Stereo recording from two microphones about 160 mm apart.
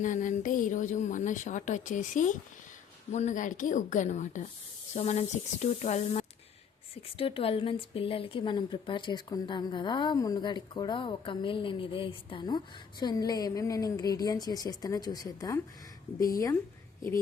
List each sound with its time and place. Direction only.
0.0 s speech: 50° left (ahead or behind)
6.9 s speech: 35° left (ahead or behind)